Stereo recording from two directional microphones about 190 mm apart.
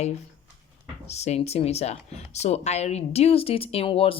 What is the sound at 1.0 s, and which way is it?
Speech, 35° left (ahead or behind).